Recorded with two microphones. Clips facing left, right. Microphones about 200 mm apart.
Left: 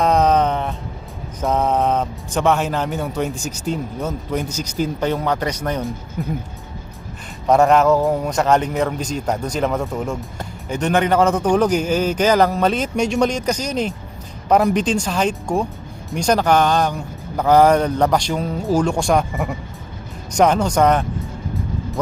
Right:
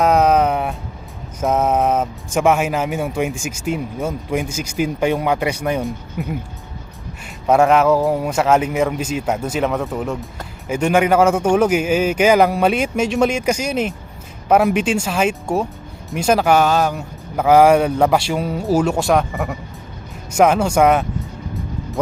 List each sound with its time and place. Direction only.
0.0 s a sound: 10° right (ahead or behind)
3.3 s speech: 35° left (ahead or behind)
3.7 s speech: 10° right (ahead or behind)
7.4 s a man's voice: 5° right (ahead or behind)
9.0 s speech: 40° left (ahead or behind)
9.2 s a man's voice: 5° right (ahead or behind)